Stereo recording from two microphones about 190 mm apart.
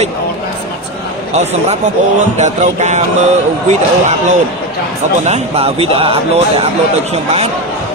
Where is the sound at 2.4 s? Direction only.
40° right (ahead or behind).